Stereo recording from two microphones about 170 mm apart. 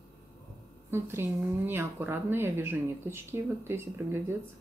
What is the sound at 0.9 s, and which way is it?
Speech, 15° right (ahead or behind).